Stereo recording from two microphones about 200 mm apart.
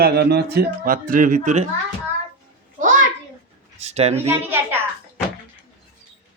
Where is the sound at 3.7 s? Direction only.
35° right (ahead or behind).